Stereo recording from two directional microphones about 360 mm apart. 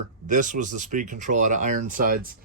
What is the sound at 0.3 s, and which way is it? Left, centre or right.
Speech, right.